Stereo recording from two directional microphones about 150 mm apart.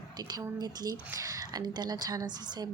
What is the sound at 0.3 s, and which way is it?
Speech, 25° right (ahead or behind).